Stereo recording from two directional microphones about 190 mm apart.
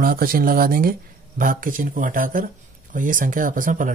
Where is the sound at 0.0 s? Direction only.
50° right (ahead or behind).